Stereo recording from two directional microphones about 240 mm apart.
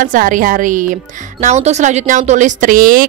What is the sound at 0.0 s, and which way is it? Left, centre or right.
Speech, right.